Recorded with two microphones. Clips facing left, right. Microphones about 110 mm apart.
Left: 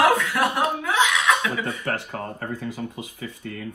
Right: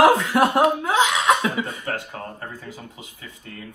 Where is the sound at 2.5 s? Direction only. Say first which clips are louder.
Left 7 dB; 60° left (ahead or behind).